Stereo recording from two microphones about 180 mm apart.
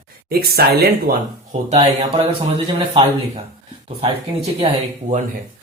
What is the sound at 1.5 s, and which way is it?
Speech, 40° right (ahead or behind).